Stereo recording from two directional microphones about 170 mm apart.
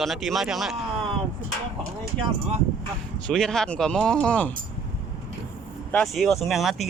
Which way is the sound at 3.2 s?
5° left (ahead or behind).